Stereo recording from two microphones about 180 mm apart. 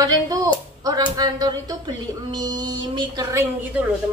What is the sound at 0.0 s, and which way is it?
A woman's voice, 20° right (ahead or behind).